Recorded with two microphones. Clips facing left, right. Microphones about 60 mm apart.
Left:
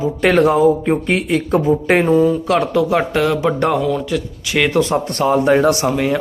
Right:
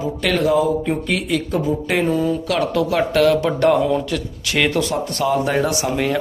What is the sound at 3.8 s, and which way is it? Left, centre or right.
Speech, centre.